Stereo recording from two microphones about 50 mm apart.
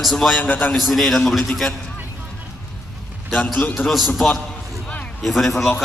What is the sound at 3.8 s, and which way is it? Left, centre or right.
Speech, left.